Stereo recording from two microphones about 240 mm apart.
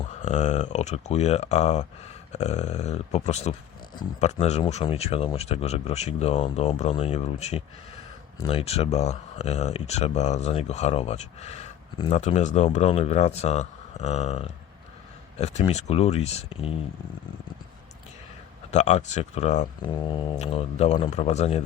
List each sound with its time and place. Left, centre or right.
0.2 s speech: left
18.7 s speech: left